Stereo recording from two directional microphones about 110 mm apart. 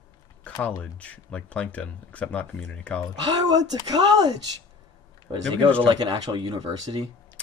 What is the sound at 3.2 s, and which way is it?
Speech, 40° right (ahead or behind).